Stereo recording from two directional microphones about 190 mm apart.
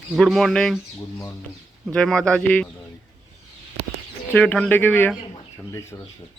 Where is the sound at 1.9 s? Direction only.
5° left (ahead or behind).